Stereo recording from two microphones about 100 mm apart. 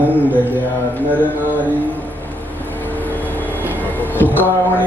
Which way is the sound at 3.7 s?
15° left (ahead or behind).